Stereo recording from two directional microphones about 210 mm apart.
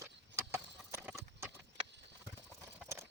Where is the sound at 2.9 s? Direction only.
10° right (ahead or behind).